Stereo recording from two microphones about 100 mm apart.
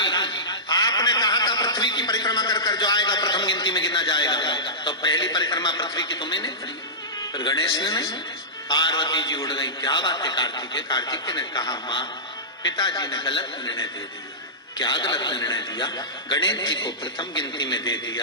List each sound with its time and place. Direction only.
0.0 s chuckle: 50° left (ahead or behind)
7.2 s a man's voice: 45° left (ahead or behind)
14.8 s a man's voice: 50° left (ahead or behind)